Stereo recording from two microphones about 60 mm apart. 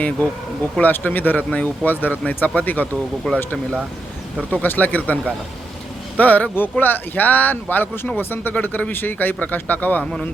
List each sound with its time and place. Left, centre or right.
0.8 s speech: left
3.3 s speech: centre
4.5 s speech: left
10.0 s a man's voice: centre